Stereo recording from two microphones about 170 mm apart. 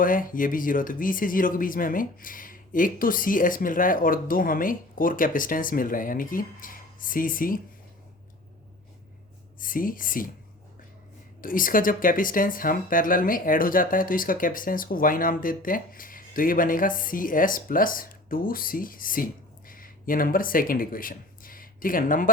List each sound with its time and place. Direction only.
0.0 s speech: 55° left (ahead or behind)
9.6 s speech: 55° left (ahead or behind)
11.3 s speech: 55° left (ahead or behind)